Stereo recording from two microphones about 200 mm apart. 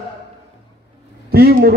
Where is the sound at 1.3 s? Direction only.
50° right (ahead or behind).